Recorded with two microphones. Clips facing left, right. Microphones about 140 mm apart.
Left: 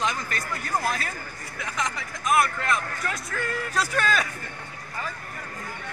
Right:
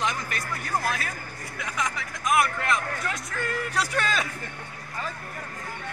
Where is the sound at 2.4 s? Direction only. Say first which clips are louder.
Right 1 dB; 15° right (ahead or behind).